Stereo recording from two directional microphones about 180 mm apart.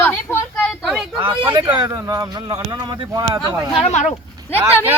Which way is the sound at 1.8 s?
20° right (ahead or behind).